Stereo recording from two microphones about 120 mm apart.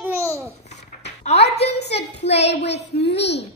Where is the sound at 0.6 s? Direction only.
70° left (ahead or behind).